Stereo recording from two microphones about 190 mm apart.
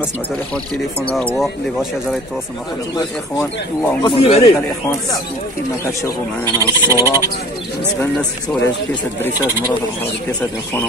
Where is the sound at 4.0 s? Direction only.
25° left (ahead or behind).